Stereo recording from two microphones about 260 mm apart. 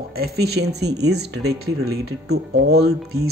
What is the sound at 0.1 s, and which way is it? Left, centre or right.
Speech, right.